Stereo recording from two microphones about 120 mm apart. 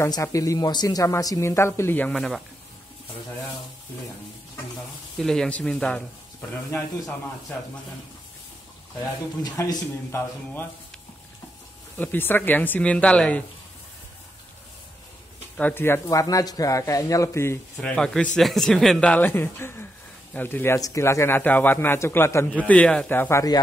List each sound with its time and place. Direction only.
0.0 s speech: 25° left (ahead or behind); by 2.4 s 5° left (ahead or behind)
5.2 s a man's voice: 5° left (ahead or behind)
9.4 s speech: 35° left (ahead or behind)
10.1 s a man's voice: 15° left (ahead or behind)
12.0 s a man's voice: 15° left (ahead or behind)
15.5 s speech: 15° left (ahead or behind)
17.7 s a man's voice: 5° left (ahead or behind)